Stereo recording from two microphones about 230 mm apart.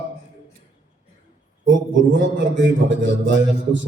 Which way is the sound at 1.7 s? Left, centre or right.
Right.